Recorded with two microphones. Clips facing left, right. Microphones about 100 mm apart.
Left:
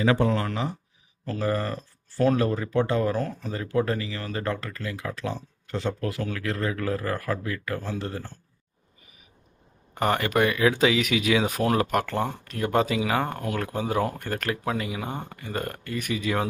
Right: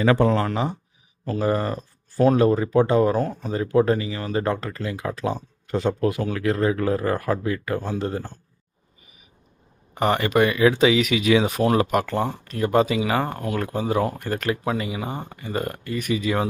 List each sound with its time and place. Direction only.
0.0 s speech: 55° right (ahead or behind)
0.3 s speech: 40° right (ahead or behind)
1.2 s speech: 15° right (ahead or behind)
9.9 s speech: centre (ahead or behind)